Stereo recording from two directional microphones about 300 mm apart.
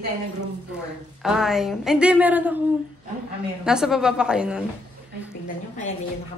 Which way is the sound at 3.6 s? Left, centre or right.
Centre.